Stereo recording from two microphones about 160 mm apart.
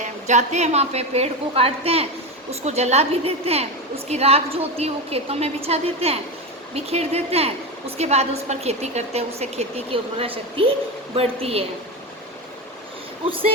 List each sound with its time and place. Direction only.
0.0 s a woman's voice: 45° right (ahead or behind)